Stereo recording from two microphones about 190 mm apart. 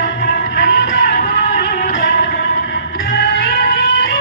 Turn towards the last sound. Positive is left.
turn(degrees=50)  # may be behind; listen again after turning